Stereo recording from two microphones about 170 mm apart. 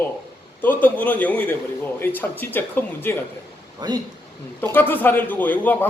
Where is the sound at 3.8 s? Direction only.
25° right (ahead or behind).